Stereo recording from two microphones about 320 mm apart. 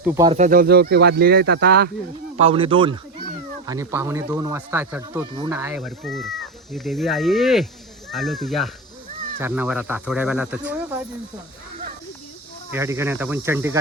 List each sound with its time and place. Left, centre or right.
0.0 s speech: centre
0.3 s speech: right
2.3 s speech: centre
12.7 s speech: centre